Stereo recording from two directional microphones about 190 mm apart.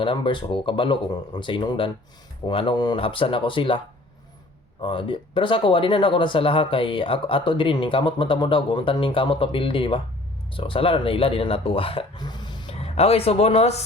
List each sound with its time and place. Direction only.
0.0 s speech: 25° left (ahead or behind)
4.8 s speech: 25° left (ahead or behind)